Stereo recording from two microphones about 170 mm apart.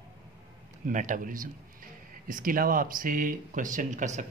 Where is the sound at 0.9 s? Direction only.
50° right (ahead or behind).